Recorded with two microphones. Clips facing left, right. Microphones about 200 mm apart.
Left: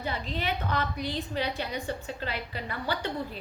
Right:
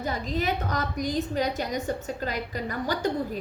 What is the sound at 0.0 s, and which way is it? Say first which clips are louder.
A woman's voice: right 4 dB; 40° right (ahead or behind).